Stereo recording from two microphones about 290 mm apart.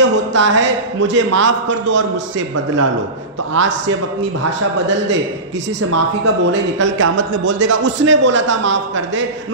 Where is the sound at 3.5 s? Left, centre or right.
Right.